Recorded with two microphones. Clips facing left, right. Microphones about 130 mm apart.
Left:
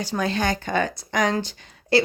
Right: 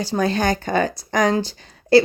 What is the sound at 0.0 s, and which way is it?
Speech, 35° right (ahead or behind).